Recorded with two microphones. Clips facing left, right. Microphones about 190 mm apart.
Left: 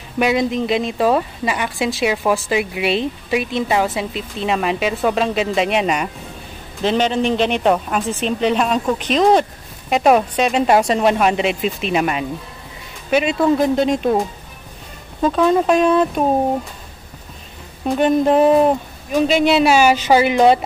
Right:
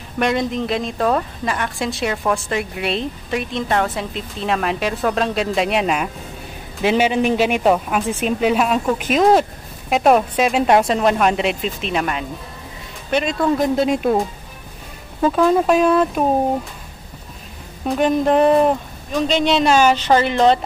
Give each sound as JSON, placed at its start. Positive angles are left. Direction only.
{"t": 0.2, "sound": "a woman's voice", "side_deg": 5}
{"t": 15.2, "sound": "a woman's voice", "side_deg": -5}
{"t": 17.8, "sound": "speech", "side_deg": 0}